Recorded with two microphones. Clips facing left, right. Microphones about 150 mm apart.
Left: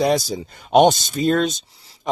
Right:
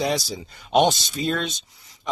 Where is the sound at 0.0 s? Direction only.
50° left (ahead or behind).